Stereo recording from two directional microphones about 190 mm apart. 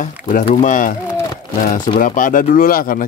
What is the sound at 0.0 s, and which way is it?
Speech, 40° left (ahead or behind).